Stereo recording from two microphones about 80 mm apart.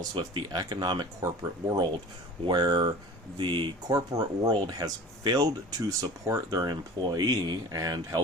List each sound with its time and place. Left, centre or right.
0.1 s speech: right
1.2 s speech: right
3.3 s speech: right
3.8 s speech: right